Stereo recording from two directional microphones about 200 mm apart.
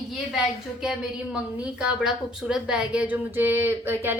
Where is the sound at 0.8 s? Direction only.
5° right (ahead or behind).